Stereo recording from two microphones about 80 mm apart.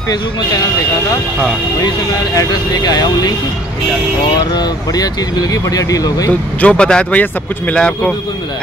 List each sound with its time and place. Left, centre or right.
2.3 s speech: left
4.6 s speech: left
6.6 s speech: centre